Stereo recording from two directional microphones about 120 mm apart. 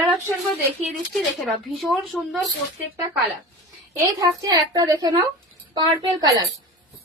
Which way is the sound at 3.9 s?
30° right (ahead or behind).